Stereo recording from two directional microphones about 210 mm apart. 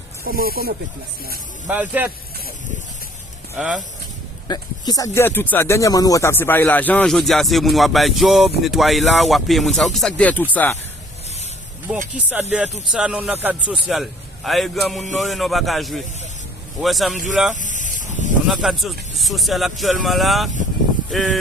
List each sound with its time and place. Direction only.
0.3 s speech: 45° right (ahead or behind)
1.6 s speech: 5° right (ahead or behind)
3.5 s speech: 5° right (ahead or behind)
4.4 s speech: 20° left (ahead or behind)
12.1 s speech: 5° right (ahead or behind)
17.9 s a sound: 35° right (ahead or behind)
18.4 s speech: centre (ahead or behind)